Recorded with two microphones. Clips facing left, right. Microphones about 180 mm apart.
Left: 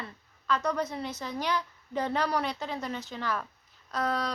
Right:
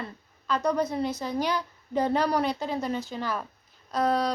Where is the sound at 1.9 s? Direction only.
35° right (ahead or behind).